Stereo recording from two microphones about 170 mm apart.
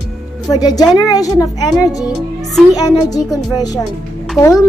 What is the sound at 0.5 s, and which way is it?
Speech, 25° left (ahead or behind).